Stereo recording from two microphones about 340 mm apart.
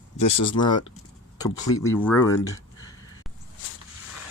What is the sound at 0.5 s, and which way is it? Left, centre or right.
Speech, centre.